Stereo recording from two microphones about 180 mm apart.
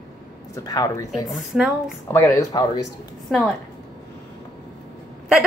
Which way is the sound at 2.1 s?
15° left (ahead or behind).